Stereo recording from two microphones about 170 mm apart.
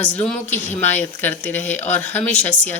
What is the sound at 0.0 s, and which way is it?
Speech, 5° left (ahead or behind).